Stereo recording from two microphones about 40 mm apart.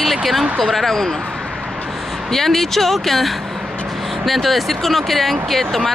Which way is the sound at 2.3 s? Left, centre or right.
Centre.